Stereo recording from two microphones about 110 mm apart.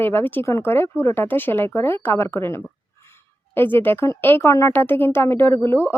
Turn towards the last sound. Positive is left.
turn(degrees=20)  # may be behind; listen again after turning